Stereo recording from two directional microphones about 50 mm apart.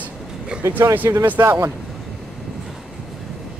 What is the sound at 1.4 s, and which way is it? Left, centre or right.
Speech, right.